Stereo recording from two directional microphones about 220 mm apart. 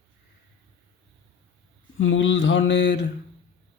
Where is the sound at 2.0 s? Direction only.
60° left (ahead or behind).